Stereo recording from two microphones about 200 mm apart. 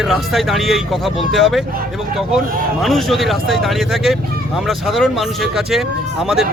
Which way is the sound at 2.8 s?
Centre (ahead or behind).